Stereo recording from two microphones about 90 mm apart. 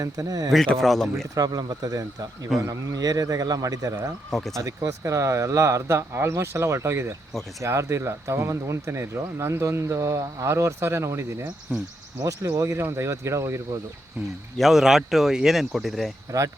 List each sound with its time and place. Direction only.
0.0 s speech: 40° right (ahead or behind)
0.7 s speech: 5° left (ahead or behind)
1.4 s a man's voice: 50° right (ahead or behind)
4.3 s speech: 5° left (ahead or behind)
4.5 s speech: 35° right (ahead or behind)
11.7 s speech: 15° right (ahead or behind)
12.2 s speech: 40° right (ahead or behind)
14.6 s speech: 5° right (ahead or behind)